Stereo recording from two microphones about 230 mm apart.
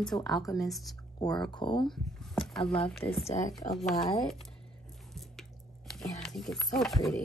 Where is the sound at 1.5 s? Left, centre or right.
Centre.